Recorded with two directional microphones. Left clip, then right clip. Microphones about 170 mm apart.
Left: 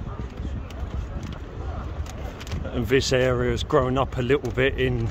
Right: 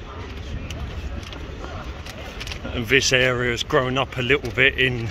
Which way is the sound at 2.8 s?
25° left (ahead or behind).